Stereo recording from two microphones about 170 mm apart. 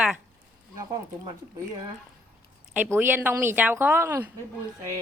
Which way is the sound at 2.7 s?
10° right (ahead or behind).